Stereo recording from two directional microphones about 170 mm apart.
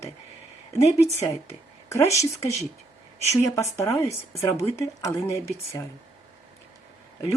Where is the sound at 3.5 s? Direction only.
20° left (ahead or behind).